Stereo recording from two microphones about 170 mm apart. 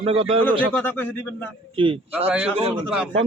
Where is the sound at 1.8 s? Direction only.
30° right (ahead or behind).